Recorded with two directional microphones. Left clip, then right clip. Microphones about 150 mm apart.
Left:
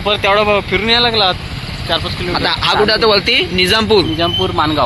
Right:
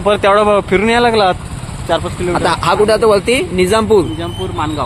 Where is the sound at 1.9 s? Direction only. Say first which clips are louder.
Right 2 dB; 90° right.